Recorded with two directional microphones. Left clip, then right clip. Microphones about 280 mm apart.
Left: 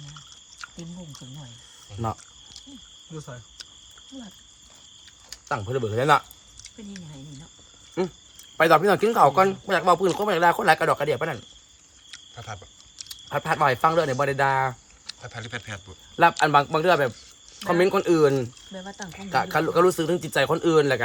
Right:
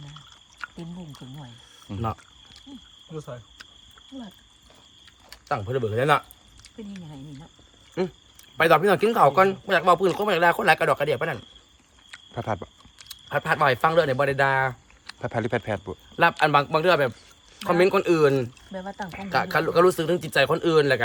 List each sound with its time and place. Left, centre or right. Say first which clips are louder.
0.1 s a sound: left 2 dB; right
3.1 s cricket: right 4 dB; right
5.5 s speech: right 1 dB; centre
8.0 s speech: even; centre
13.1 s speech: right 1 dB; centre
15.0 s speech: right 9 dB; centre
16.4 s speech: even; centre
18.7 s speech: right 3 dB; centre
19.3 s speech: even; centre